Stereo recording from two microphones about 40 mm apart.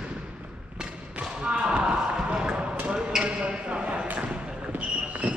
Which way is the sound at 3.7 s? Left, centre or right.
Right.